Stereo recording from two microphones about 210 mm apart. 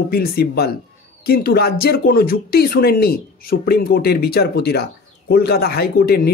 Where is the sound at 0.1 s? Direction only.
45° left (ahead or behind).